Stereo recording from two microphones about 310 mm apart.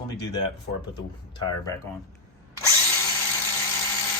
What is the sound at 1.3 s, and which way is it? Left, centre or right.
Speech, centre.